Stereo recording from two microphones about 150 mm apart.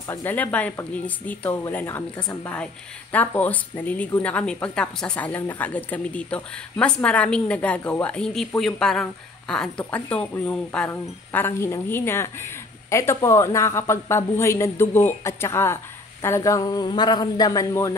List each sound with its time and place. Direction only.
0.1 s a woman's voice: 10° left (ahead or behind)